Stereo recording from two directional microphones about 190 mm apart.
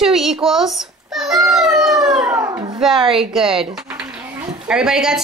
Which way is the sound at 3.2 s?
Centre (ahead or behind).